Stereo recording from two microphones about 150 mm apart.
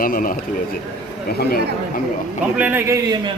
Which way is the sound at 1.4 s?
90° left.